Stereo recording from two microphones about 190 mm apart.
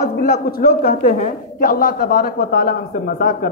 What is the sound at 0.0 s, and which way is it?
A man's voice, 55° left (ahead or behind).